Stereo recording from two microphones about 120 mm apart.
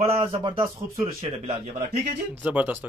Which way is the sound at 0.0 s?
55° right (ahead or behind).